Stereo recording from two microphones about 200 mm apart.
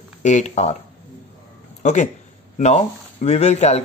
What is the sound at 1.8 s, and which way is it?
A man's voice, 35° left (ahead or behind).